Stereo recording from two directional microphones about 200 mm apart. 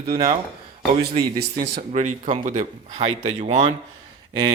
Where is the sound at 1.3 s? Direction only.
50° right (ahead or behind).